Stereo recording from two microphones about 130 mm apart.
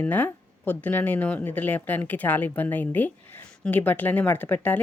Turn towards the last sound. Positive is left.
turn(degrees=15)  # may be behind; listen again after turning